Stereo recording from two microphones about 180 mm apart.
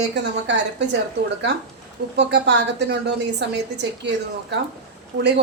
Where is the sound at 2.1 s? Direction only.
70° right (ahead or behind).